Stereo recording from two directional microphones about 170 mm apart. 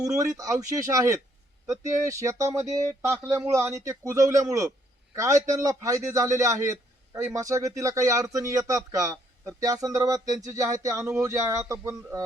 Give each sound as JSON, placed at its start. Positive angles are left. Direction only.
{"t": 0.0, "sound": "a man's voice", "side_deg": -20}